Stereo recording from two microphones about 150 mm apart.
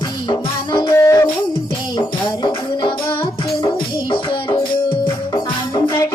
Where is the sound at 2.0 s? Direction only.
30° left (ahead or behind).